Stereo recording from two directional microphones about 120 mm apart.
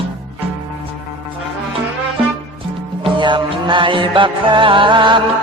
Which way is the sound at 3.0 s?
40° right (ahead or behind).